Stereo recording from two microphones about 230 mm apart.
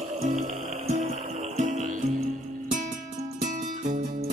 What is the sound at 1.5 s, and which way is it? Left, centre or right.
Music, right.